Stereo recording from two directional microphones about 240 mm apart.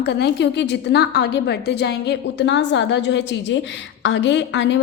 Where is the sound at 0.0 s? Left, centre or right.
Left.